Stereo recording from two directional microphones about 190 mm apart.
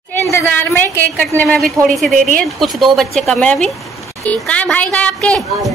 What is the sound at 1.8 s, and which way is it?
A woman's voice, centre (ahead or behind).